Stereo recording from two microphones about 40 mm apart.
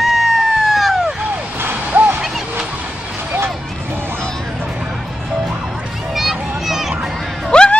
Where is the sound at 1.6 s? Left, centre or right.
Right.